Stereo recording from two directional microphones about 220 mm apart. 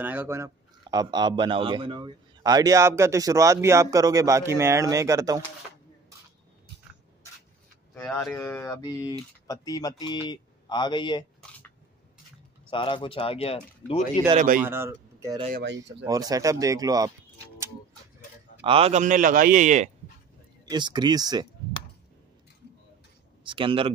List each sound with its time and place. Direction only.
0.0 s a man's voice: 10° right (ahead or behind)
7.9 s speech: 10° left (ahead or behind)
12.6 s speech: 25° left (ahead or behind)
14.3 s a man's voice: 35° right (ahead or behind)
14.6 s a man's voice: 10° right (ahead or behind)
18.6 s a man's voice: 25° right (ahead or behind)
20.7 s speech: 20° right (ahead or behind)
23.4 s speech: 25° right (ahead or behind)